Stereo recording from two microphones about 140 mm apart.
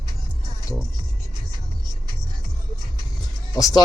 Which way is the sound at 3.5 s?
25° left (ahead or behind).